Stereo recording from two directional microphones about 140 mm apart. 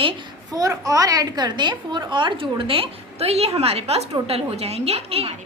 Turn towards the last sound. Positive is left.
turn(degrees=-45)  # may be behind; listen again after turning